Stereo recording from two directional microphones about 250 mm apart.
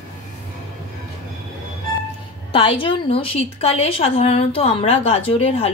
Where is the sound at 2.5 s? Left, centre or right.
Left.